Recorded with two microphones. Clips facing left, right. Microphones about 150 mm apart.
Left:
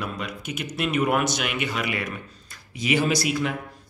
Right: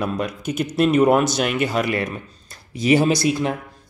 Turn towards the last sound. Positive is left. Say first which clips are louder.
# right 5 dB
turn(degrees=-30)  # may be behind; listen again after turning